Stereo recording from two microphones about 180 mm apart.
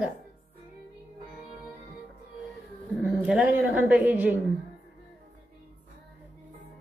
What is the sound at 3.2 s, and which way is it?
A woman's voice, 5° right (ahead or behind).